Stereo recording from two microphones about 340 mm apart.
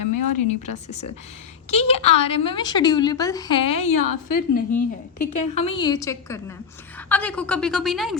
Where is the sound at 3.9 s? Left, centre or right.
Left.